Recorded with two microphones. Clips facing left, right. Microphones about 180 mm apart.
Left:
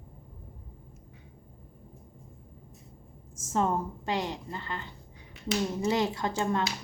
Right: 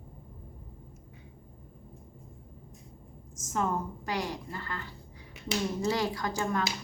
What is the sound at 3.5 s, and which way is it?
A woman's voice, 30° left (ahead or behind).